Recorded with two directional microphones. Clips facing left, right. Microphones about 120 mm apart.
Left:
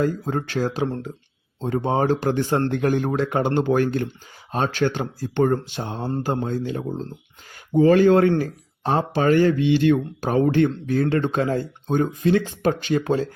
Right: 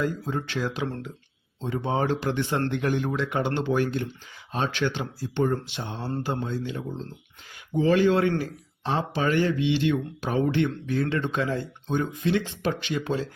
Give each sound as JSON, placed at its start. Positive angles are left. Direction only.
{"t": 0.0, "sound": "speech", "side_deg": 45}
{"t": 1.6, "sound": "speech", "side_deg": 45}